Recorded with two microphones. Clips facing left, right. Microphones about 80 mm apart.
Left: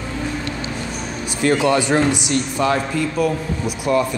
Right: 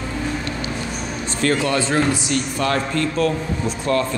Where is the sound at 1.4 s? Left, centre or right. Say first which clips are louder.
Left 3 dB; centre.